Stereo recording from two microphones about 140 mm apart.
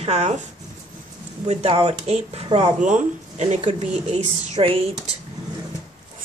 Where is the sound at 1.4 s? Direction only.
50° right (ahead or behind).